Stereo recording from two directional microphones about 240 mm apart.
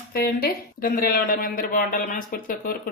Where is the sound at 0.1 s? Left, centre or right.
Left.